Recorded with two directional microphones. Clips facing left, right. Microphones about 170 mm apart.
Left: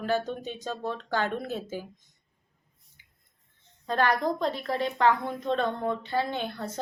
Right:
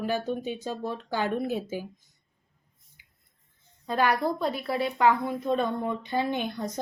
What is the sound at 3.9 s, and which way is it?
A woman's voice, 10° right (ahead or behind).